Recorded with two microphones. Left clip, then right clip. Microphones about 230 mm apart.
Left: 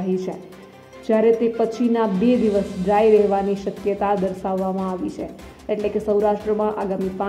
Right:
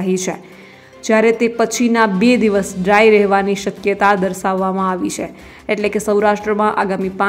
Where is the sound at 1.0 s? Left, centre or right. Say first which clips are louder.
Right 4 dB; centre.